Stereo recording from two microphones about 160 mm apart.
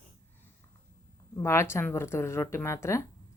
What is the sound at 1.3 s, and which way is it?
A woman's voice, 15° left (ahead or behind).